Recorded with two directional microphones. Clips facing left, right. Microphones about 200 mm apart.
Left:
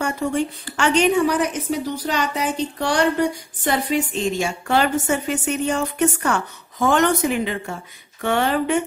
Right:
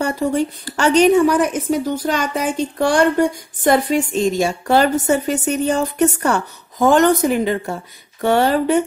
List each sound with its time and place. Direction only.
0.0 s a woman's voice: 40° right (ahead or behind)